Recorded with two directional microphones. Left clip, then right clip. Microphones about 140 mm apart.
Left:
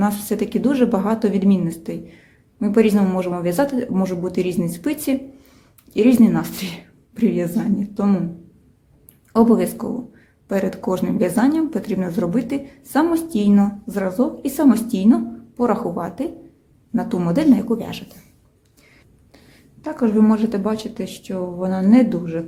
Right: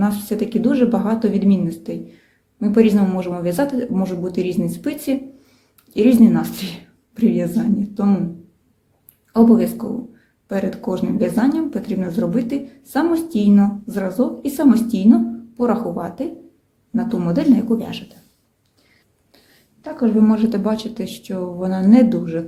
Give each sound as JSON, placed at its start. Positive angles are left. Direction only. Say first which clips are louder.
{"t": 0.0, "sound": "speech", "louder": "even", "side_deg": 25}
{"t": 9.3, "sound": "a woman's voice", "louder": "right 1 dB", "side_deg": 30}
{"t": 19.8, "sound": "speech", "louder": "even", "side_deg": 30}